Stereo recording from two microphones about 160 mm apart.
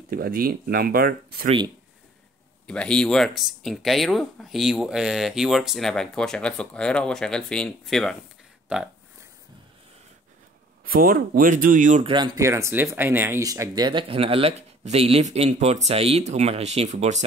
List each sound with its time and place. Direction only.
0.1 s speech: 65° right (ahead or behind)
2.6 s speech: 5° left (ahead or behind)
8.7 s speech: 10° right (ahead or behind)
10.9 s speech: 65° right (ahead or behind)
12.0 s speech: 30° right (ahead or behind)
12.4 s speech: 20° right (ahead or behind); by 17.2 s 45° right (ahead or behind)